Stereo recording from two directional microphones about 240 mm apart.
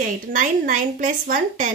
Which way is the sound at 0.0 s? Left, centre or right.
Right.